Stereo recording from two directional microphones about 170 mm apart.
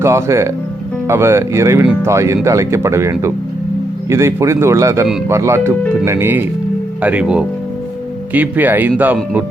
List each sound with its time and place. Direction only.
0.0 s speech: 15° right (ahead or behind)